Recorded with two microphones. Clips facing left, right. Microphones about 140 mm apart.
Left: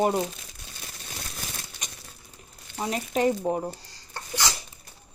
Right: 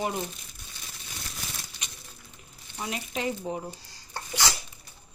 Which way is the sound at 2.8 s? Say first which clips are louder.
Left 7 dB; 40° left (ahead or behind).